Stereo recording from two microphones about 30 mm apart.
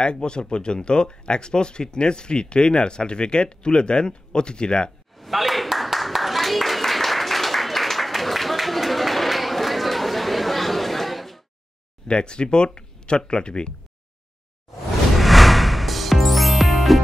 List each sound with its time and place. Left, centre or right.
0.0 s speech: left
5.1 s a sound: centre
12.1 s speech: left
15.1 s music: centre